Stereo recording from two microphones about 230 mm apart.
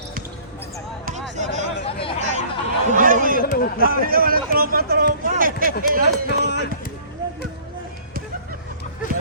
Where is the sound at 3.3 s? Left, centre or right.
Left.